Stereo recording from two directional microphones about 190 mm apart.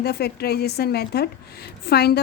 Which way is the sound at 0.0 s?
55° left (ahead or behind).